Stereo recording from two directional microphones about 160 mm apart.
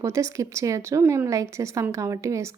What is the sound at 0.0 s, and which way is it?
Speech, 20° right (ahead or behind).